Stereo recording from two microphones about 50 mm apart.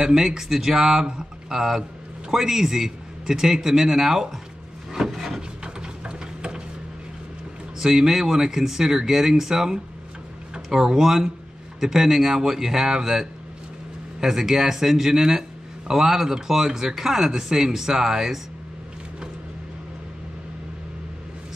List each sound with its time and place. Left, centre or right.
0.0 s speech: centre
4.9 s wood: centre
5.6 s a sound: centre
7.8 s speech: centre